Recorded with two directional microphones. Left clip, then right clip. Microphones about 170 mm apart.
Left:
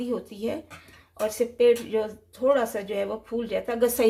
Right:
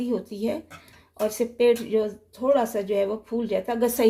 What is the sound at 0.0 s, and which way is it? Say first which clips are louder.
Speech: right 2 dB; 25° right (ahead or behind).